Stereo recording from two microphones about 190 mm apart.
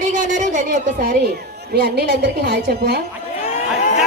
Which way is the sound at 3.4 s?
35° left (ahead or behind).